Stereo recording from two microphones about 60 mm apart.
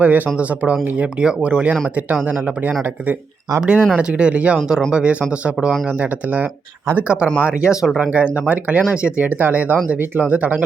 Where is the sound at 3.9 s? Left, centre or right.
Centre.